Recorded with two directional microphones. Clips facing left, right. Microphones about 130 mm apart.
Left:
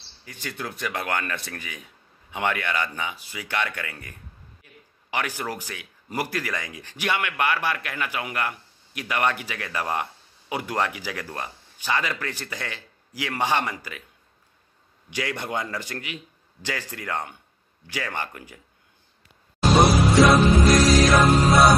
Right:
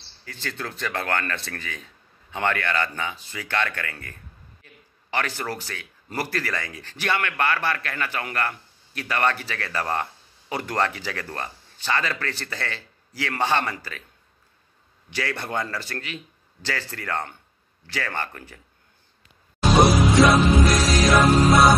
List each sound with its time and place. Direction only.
0.2 s speech: 15° left (ahead or behind)
4.6 s a sound: 15° left (ahead or behind)
5.1 s speech: 15° left (ahead or behind)
15.0 s speech: 15° left (ahead or behind)
19.8 s music: centre (ahead or behind)